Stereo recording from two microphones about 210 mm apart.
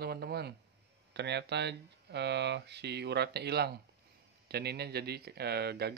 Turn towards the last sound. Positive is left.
turn(degrees=-50)  # may be behind; listen again after turning